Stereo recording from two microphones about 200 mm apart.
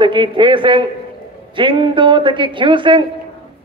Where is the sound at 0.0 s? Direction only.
25° right (ahead or behind).